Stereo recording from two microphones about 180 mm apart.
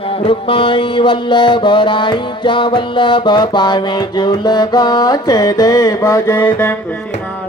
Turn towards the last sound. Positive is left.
turn(degrees=10)  # may be behind; listen again after turning